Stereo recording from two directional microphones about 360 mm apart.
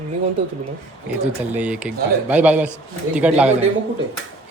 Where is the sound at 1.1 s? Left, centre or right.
Centre.